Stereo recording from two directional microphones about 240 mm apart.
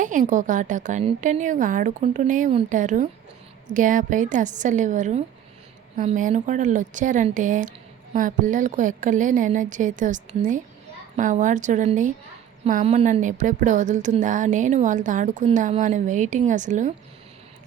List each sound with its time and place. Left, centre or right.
0.0 s speech: right